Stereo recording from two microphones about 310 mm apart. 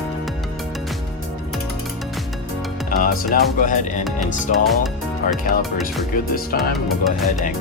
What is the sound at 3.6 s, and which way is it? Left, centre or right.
Speech, left.